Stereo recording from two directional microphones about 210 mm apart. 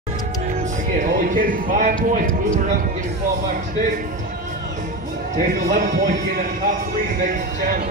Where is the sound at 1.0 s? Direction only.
40° right (ahead or behind).